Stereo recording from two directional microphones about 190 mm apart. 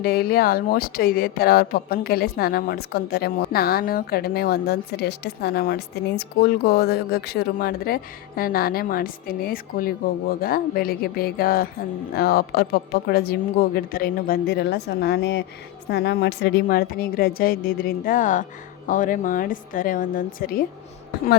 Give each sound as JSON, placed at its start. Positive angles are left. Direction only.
{"t": 0.0, "sound": "speech", "side_deg": 50}